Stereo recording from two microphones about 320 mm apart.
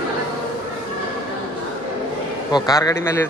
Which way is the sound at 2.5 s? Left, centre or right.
Centre.